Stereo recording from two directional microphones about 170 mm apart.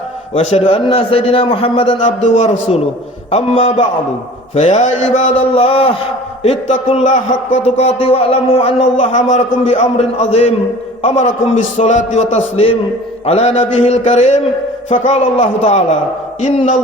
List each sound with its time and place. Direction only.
0.3 s a man's voice: 35° left (ahead or behind)
4.5 s a man's voice: 45° left (ahead or behind)
16.4 s a man's voice: 45° left (ahead or behind)